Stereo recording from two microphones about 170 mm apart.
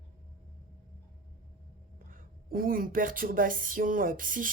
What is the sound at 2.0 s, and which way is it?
Speech, 55° right (ahead or behind).